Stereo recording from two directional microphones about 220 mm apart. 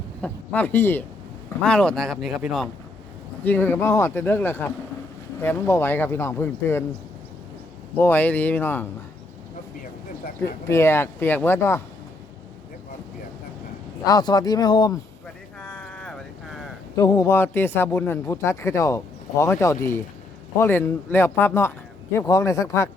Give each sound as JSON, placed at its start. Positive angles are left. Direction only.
{"t": 0.2, "sound": "a man's voice", "side_deg": 5}
{"t": 7.9, "sound": "a man's voice", "side_deg": 10}
{"t": 10.7, "sound": "a man's voice", "side_deg": 10}
{"t": 14.0, "sound": "a man's voice", "side_deg": 15}
{"t": 15.6, "sound": "a sound", "side_deg": 5}
{"t": 16.9, "sound": "a man's voice", "side_deg": 15}